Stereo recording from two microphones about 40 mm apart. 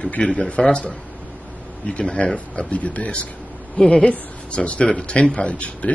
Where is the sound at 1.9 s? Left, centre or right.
Left.